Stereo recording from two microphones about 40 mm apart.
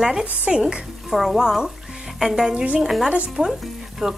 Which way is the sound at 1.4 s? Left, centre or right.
Centre.